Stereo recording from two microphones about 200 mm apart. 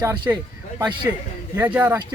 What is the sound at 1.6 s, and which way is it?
Speech, 10° right (ahead or behind).